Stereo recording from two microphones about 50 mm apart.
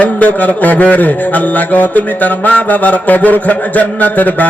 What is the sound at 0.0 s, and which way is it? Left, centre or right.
Mantra, left.